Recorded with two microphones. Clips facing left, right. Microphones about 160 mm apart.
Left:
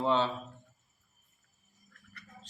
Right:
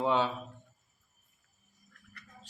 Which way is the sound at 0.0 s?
10° right (ahead or behind).